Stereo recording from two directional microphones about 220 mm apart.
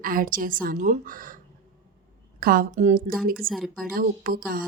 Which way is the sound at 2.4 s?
40° right (ahead or behind).